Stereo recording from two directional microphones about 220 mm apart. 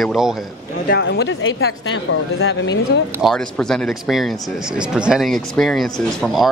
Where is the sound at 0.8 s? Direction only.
50° left (ahead or behind).